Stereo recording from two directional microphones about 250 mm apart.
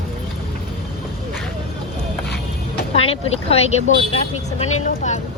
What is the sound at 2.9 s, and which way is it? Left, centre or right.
Vehicle, left.